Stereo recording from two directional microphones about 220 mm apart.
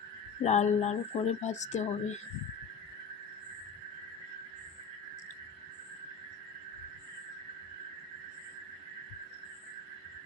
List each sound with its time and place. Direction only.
0.4 s speech: 30° left (ahead or behind)